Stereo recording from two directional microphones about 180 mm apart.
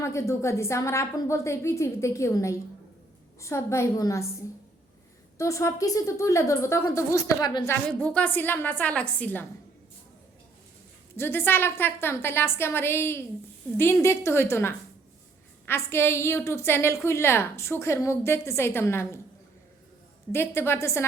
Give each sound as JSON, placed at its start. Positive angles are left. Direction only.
{"t": 0.0, "sound": "a woman's voice", "side_deg": 15}
{"t": 5.4, "sound": "a woman's voice", "side_deg": 15}
{"t": 7.9, "sound": "a woman's voice", "side_deg": 5}
{"t": 11.2, "sound": "a woman's voice", "side_deg": 10}
{"t": 20.3, "sound": "a woman's voice", "side_deg": 15}